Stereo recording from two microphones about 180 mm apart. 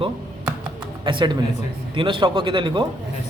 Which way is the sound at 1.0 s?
25° right (ahead or behind).